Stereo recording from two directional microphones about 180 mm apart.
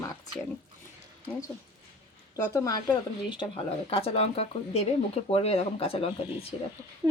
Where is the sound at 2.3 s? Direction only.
20° left (ahead or behind).